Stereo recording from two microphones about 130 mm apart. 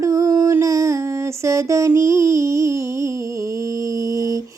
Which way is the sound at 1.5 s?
25° right (ahead or behind).